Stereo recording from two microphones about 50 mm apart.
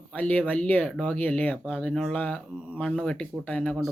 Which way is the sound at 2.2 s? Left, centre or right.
Left.